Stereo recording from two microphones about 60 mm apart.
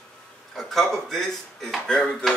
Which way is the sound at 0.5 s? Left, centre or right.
Centre.